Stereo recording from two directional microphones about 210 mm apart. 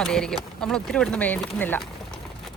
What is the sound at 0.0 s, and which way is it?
A woman's voice, 5° left (ahead or behind).